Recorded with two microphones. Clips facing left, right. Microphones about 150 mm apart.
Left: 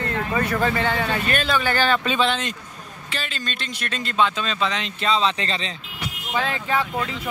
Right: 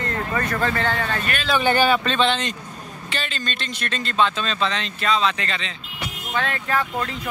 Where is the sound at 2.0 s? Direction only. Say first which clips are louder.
Right 1 dB; 5° left (ahead or behind); by 5.7 s 30° left (ahead or behind).